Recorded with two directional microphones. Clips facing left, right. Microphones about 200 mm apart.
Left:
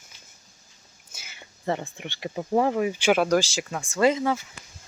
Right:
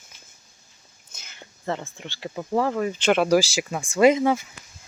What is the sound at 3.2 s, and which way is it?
Speech, 5° right (ahead or behind).